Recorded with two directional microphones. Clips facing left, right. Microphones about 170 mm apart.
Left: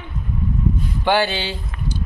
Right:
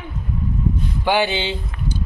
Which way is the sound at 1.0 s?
15° right (ahead or behind).